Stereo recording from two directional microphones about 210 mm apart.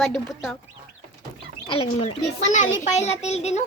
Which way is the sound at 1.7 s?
30° left (ahead or behind).